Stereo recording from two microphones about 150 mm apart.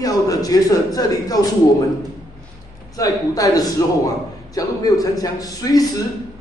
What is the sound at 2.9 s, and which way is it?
A man's voice, 25° left (ahead or behind).